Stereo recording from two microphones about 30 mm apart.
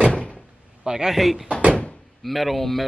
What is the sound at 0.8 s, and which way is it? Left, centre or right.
Speech, centre.